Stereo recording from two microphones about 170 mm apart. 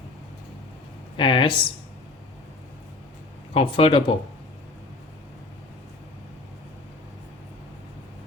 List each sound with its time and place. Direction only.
1.1 s speech: 30° left (ahead or behind)
3.5 s speech: 35° left (ahead or behind)